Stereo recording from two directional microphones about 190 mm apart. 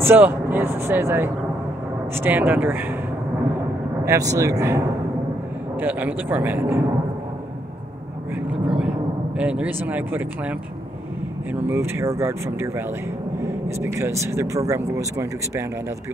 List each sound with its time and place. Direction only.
0.0 s speech: 10° right (ahead or behind)
4.0 s speech: 15° right (ahead or behind)
8.6 s a sound: 5° right (ahead or behind)
9.4 s speech: 5° right (ahead or behind)
11.6 s speech: 10° right (ahead or behind)